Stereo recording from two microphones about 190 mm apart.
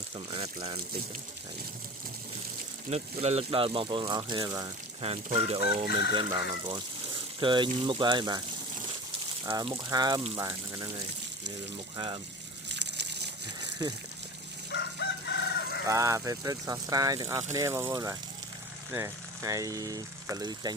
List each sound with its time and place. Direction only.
0.3 s speech: 30° right (ahead or behind)
2.9 s speech: 35° right (ahead or behind)
5.0 s speech: 30° right (ahead or behind)
12.6 s a sound: 65° right (ahead or behind)
13.8 s speech: 20° right (ahead or behind)
14.7 s chicken: 65° left (ahead or behind)
15.9 s speech: 15° right (ahead or behind)